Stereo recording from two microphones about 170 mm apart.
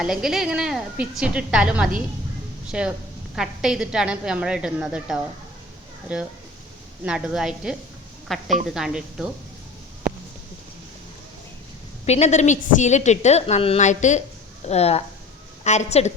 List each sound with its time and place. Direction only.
0.0 s a woman's voice: 5° right (ahead or behind)
12.0 s a woman's voice: 40° left (ahead or behind)